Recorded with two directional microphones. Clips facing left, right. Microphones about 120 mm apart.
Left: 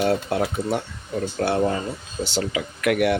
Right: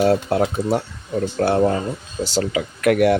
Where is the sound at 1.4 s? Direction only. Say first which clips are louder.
Right 4 dB; 40° right (ahead or behind).